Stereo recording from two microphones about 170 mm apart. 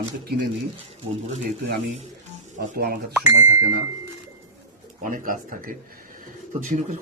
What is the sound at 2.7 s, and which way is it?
Speech, 65° right (ahead or behind).